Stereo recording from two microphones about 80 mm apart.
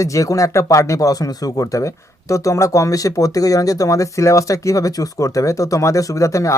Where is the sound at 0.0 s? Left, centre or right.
Left.